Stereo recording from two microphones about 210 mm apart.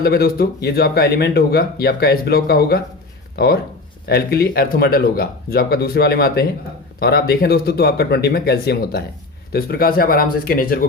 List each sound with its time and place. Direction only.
0.0 s speech: 45° left (ahead or behind)